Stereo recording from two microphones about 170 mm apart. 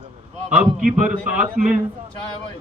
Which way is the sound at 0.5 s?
5° right (ahead or behind).